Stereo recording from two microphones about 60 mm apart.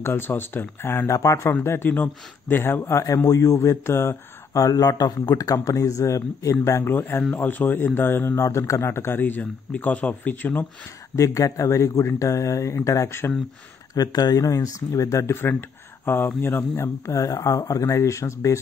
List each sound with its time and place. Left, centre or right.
0.0 s speech: left
1.0 s speech: left
1.6 s speech: left
3.3 s speech: left
4.6 s a man's voice: left
6.9 s speech: left
9.2 s speech: left
11.1 s a man's voice: left
13.9 s a man's voice: left
16.3 s speech: left